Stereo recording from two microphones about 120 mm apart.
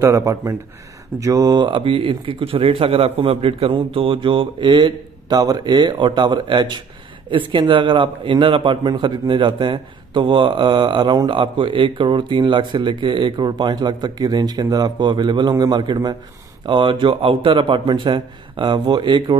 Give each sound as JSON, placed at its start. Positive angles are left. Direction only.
{"t": 0.0, "sound": "a man's voice", "side_deg": -25}